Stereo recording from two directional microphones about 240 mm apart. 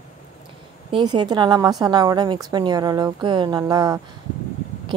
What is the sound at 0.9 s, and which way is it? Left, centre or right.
A woman's voice, centre.